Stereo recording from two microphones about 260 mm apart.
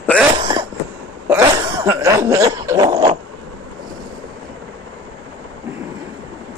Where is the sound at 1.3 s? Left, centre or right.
Centre.